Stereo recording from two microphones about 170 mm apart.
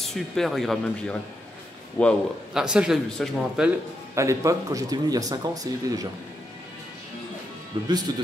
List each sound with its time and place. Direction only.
0.1 s a man's voice: centre (ahead or behind)
2.5 s a man's voice: 5° right (ahead or behind)
4.1 s speech: 15° right (ahead or behind)
7.7 s speech: 25° right (ahead or behind)